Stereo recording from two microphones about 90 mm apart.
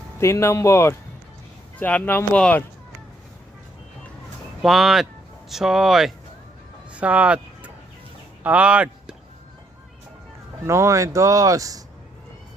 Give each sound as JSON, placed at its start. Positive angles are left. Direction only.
{"t": 0.2, "sound": "speech", "side_deg": 30}
{"t": 1.8, "sound": "speech", "side_deg": 15}
{"t": 4.6, "sound": "speech", "side_deg": 0}
{"t": 6.9, "sound": "music", "side_deg": -15}
{"t": 8.4, "sound": "speech", "side_deg": -15}
{"t": 10.7, "sound": "speech", "side_deg": -30}